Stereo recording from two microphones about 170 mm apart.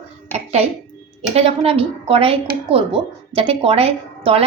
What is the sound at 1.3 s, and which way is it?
A woman's voice, 35° right (ahead or behind).